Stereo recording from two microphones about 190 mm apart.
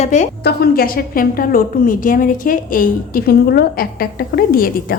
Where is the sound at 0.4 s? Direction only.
55° left (ahead or behind).